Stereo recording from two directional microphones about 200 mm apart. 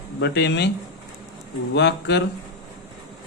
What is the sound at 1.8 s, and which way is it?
Speech, 60° left (ahead or behind).